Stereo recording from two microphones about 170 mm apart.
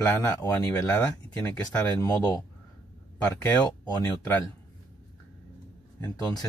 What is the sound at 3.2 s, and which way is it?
Speech, 10° left (ahead or behind).